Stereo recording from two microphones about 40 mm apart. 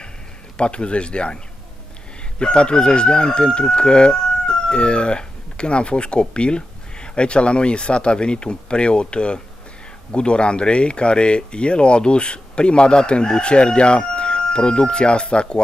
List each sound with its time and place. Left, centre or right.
0.6 s chicken: left